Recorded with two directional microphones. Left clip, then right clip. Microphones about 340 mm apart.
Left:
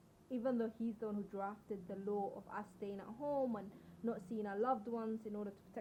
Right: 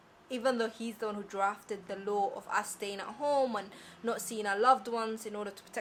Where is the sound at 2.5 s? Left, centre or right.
Centre.